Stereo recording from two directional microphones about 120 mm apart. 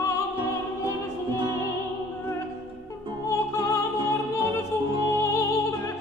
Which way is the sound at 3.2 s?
25° left (ahead or behind).